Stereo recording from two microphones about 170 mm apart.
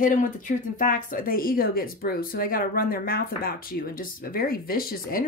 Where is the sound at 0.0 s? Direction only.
50° left (ahead or behind).